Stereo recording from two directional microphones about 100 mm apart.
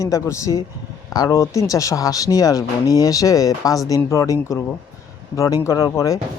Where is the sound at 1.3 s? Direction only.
30° left (ahead or behind).